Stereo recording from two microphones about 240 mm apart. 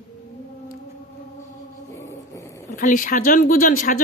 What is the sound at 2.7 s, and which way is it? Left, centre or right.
Speech, left.